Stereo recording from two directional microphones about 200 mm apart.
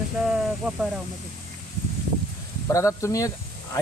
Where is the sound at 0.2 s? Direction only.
5° right (ahead or behind).